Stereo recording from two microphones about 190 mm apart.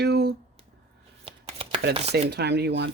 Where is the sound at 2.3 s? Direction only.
60° right (ahead or behind).